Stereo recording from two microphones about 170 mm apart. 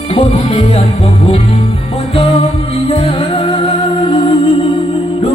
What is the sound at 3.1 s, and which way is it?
Music, 35° left (ahead or behind).